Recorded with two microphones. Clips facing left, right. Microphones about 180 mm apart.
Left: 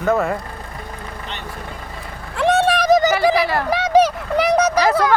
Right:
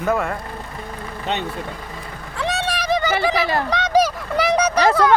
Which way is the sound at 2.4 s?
55° left (ahead or behind).